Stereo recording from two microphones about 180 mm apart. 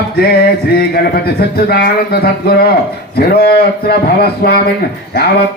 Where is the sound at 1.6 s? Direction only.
60° left (ahead or behind).